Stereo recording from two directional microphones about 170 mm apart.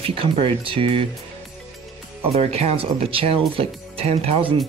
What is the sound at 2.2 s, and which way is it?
Speech, 35° right (ahead or behind).